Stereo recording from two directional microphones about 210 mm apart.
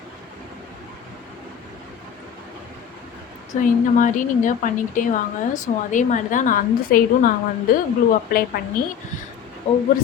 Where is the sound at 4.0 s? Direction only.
40° left (ahead or behind).